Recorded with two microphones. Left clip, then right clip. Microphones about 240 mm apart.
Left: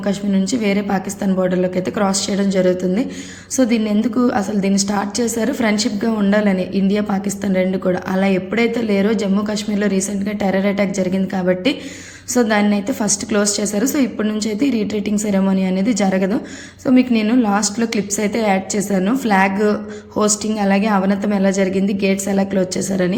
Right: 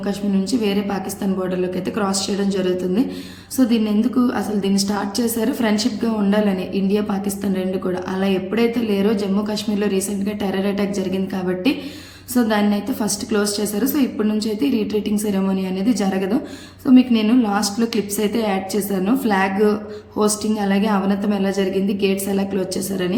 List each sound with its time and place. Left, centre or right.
0.6 s a woman's voice: centre